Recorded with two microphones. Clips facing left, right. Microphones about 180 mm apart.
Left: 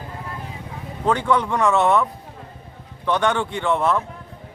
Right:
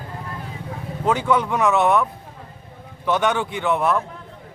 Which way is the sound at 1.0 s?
5° right (ahead or behind).